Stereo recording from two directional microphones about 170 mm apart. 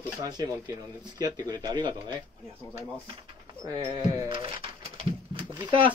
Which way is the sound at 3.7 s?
25° right (ahead or behind).